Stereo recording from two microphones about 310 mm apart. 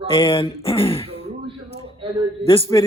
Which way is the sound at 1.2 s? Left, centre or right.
Centre.